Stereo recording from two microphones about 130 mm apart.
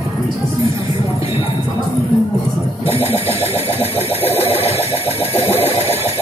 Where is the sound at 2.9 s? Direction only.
45° left (ahead or behind).